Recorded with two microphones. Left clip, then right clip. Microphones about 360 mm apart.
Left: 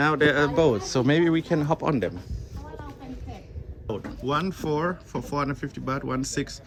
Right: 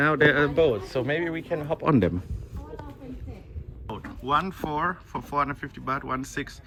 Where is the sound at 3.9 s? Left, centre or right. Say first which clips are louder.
Right 2 dB; centre.